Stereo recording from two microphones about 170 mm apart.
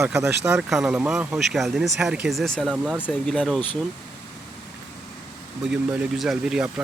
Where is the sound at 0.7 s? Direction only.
Centre (ahead or behind).